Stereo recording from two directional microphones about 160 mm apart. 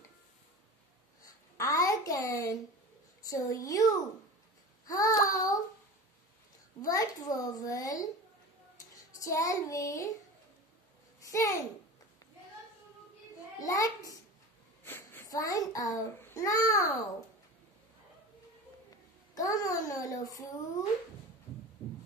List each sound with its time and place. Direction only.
1.2 s a sound: 20° left (ahead or behind)
3.2 s a child's voice: 20° left (ahead or behind)
6.8 s a child's voice: 20° left (ahead or behind)
8.9 s child singing: 20° left (ahead or behind)
11.1 s babbling: 20° left (ahead or behind)
13.6 s a child's voice: 20° left (ahead or behind)
19.3 s a child's voice: 20° left (ahead or behind)